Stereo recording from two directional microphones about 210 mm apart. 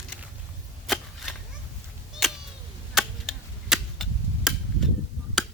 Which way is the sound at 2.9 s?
Centre (ahead or behind).